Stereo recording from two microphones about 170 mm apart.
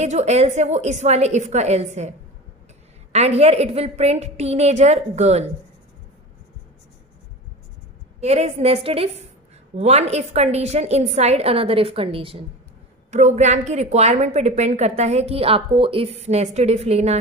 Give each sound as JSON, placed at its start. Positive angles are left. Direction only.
{"t": 0.0, "sound": "a woman's voice", "side_deg": -40}
{"t": 8.2, "sound": "a woman's voice", "side_deg": -40}
{"t": 13.1, "sound": "a woman's voice", "side_deg": -45}